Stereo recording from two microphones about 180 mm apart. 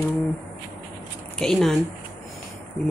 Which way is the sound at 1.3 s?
Centre (ahead or behind).